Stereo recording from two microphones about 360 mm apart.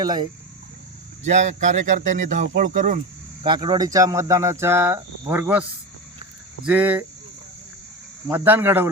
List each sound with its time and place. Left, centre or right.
0.0 s speech: centre
6.7 s speech: centre
8.3 s speech: centre